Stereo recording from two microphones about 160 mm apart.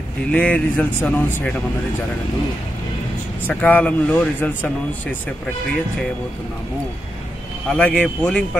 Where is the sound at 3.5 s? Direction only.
10° left (ahead or behind).